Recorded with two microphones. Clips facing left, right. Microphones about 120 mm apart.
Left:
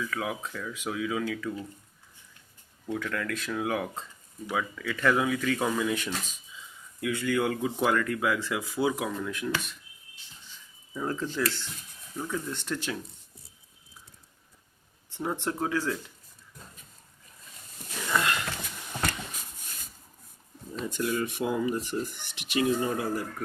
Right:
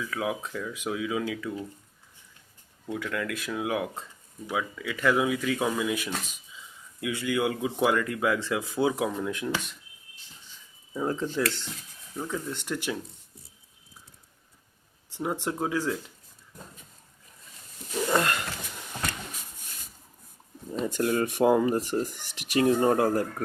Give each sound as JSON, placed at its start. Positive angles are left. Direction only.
{"t": 0.1, "sound": "speech", "side_deg": -20}
{"t": 2.9, "sound": "speech", "side_deg": -10}
{"t": 10.9, "sound": "speech", "side_deg": -20}
{"t": 15.1, "sound": "speech", "side_deg": -15}
{"t": 18.1, "sound": "sniff", "side_deg": -45}
{"t": 20.8, "sound": "speech", "side_deg": -45}